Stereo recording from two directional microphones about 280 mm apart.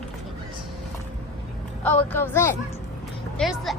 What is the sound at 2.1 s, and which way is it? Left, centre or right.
A woman's voice, centre.